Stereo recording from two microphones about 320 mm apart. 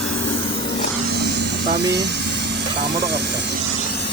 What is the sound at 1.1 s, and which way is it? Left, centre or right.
Vehicle, right.